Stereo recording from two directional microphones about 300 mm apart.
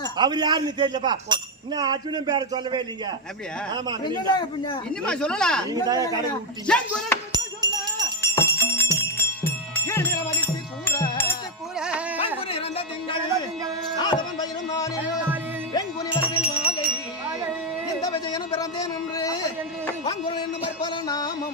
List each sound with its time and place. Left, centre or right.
0.2 s speech: centre
5.0 s speech: centre
5.7 s speech: centre
6.7 s speech: centre
7.3 s music: centre
8.2 s jingle bell: centre
9.1 s music: centre
11.8 s music: centre
12.5 s music: centre
14.0 s dog: centre
15.7 s music: centre
18.0 s a sound: centre
20.1 s music: centre